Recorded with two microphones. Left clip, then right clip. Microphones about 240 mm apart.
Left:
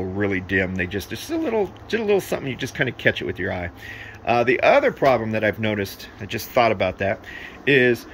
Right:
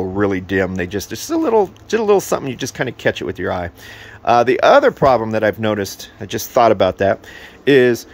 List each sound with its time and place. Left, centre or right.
0.2 s speech: right